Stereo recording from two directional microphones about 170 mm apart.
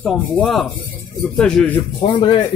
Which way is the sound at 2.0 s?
30° left (ahead or behind).